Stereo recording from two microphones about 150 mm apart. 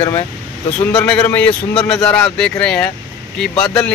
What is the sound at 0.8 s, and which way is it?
Speech, 5° left (ahead or behind).